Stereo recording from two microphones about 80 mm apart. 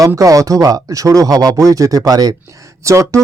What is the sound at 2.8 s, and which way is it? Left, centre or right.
Speech, right.